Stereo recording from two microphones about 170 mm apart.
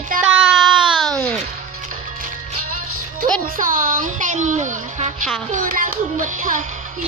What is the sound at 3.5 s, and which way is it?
A woman's voice, 55° right (ahead or behind).